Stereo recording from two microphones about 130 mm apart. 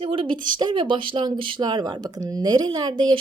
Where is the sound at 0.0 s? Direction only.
45° right (ahead or behind).